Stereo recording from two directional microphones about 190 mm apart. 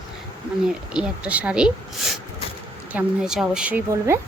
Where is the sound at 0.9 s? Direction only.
5° right (ahead or behind).